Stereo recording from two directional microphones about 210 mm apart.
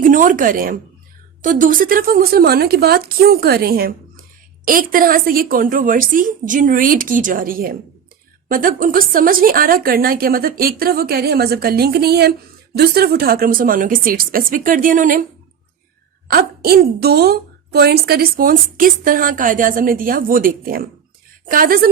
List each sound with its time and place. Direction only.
0.0 s a woman's voice: 40° right (ahead or behind)
16.3 s a woman's voice: 50° right (ahead or behind)